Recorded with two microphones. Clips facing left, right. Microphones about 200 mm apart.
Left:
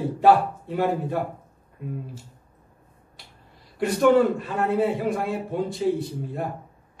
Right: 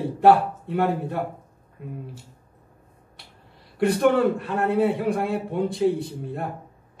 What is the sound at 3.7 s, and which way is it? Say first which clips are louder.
A man's voice: left 1 dB; 60° right (ahead or behind).